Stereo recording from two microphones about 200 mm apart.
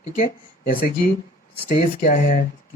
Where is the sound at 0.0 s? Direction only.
45° left (ahead or behind).